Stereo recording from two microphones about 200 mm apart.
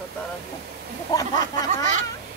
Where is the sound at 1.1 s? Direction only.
20° left (ahead or behind).